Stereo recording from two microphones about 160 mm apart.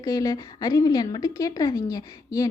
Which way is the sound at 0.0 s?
20° left (ahead or behind).